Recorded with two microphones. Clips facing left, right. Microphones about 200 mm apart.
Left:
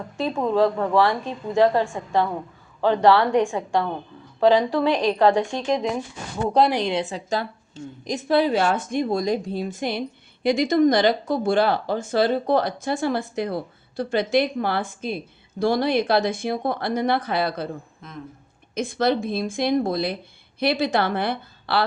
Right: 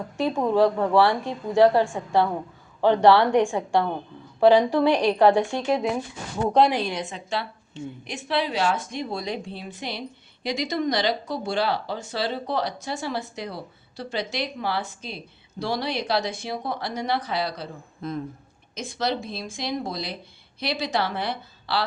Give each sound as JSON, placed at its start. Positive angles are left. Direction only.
{"t": 0.2, "sound": "a woman's voice", "side_deg": -10}
{"t": 6.7, "sound": "a woman's voice", "side_deg": 20}
{"t": 7.1, "sound": "speech", "side_deg": 40}
{"t": 18.0, "sound": "speech", "side_deg": -35}
{"t": 18.7, "sound": "a woman's voice", "side_deg": 55}